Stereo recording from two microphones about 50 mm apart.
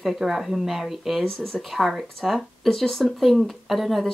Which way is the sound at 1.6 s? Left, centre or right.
Centre.